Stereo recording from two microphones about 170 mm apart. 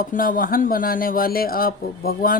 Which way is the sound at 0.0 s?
55° left (ahead or behind).